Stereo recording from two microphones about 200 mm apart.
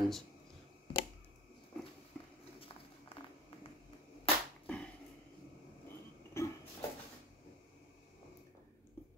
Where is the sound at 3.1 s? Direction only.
25° left (ahead or behind).